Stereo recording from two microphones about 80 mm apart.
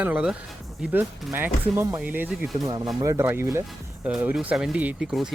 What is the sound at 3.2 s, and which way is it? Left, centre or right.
Speech, right.